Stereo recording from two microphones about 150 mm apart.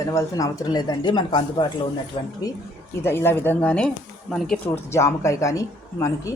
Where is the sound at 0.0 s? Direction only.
20° left (ahead or behind); by 2.3 s 40° left (ahead or behind).